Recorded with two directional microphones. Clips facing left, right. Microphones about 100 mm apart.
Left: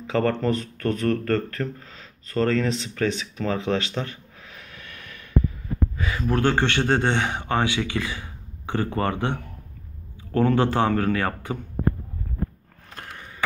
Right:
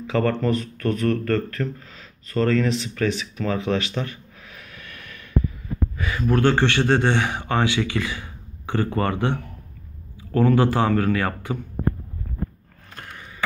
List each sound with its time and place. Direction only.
0.0 s speech: 30° left (ahead or behind)